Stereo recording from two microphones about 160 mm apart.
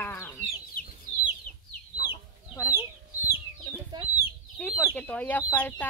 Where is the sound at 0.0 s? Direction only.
10° left (ahead or behind).